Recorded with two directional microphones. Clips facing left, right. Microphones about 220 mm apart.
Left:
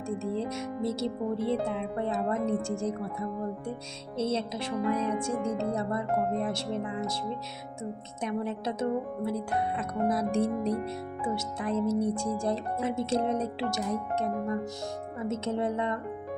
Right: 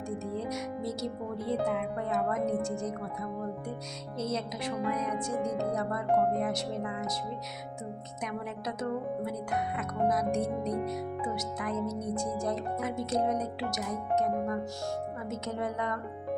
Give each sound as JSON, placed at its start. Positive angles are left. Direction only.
{"t": 0.2, "sound": "speech", "side_deg": 25}
{"t": 8.2, "sound": "speech", "side_deg": 30}